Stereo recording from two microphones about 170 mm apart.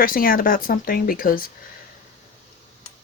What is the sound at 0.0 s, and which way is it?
Speech, 55° left (ahead or behind).